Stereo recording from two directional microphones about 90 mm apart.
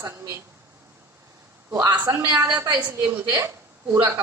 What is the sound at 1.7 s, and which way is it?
Speech, 45° right (ahead or behind).